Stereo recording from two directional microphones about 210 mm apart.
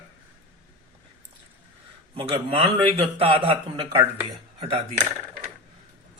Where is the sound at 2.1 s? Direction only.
25° right (ahead or behind).